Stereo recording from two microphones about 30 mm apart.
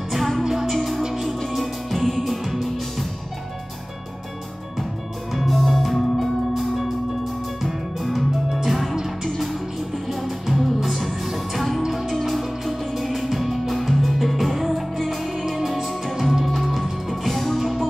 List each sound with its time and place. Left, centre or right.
0.1 s music: centre
0.4 s music: centre
0.7 s music: centre
5.3 s music: centre
8.5 s music: centre
17.1 s music: centre